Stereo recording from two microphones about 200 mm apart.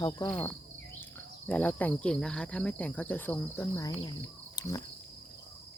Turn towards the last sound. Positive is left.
turn(degrees=15)  # may be behind; listen again after turning